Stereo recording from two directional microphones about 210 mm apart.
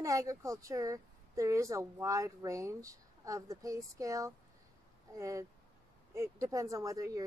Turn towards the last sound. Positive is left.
turn(degrees=-15)  # may be behind; listen again after turning